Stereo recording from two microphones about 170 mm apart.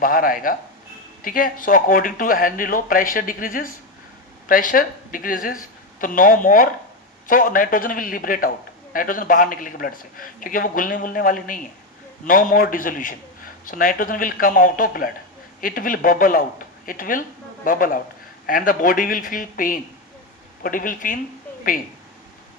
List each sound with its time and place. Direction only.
0.0 s a man's voice: 55° left (ahead or behind)